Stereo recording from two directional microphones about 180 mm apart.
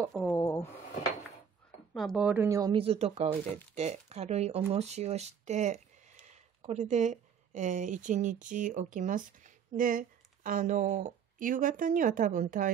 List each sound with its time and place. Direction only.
0.3 s a sound: 15° left (ahead or behind)
2.0 s speech: centre (ahead or behind)
2.4 s speech: 20° right (ahead or behind); by 12.7 s 45° right (ahead or behind)